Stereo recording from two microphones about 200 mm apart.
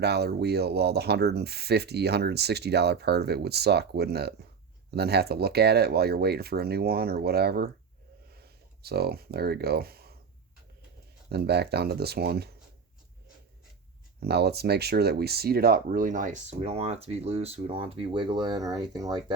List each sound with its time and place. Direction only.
0.0 s speech: 55° right (ahead or behind)
8.3 s a sound: 50° right (ahead or behind)
11.3 s speech: 55° right (ahead or behind)
14.2 s speech: 55° right (ahead or behind); by 19.2 s 20° right (ahead or behind)